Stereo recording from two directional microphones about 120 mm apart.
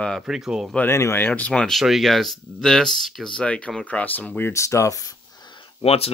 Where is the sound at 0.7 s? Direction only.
20° left (ahead or behind); by 5.7 s 40° left (ahead or behind).